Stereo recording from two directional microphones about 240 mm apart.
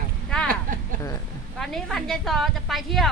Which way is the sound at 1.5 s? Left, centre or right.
Centre.